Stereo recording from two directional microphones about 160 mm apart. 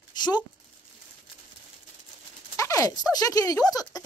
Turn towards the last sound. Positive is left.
turn(degrees=20)  # may be behind; listen again after turning